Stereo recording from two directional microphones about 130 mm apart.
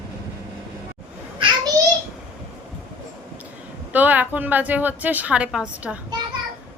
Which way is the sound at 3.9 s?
15° right (ahead or behind).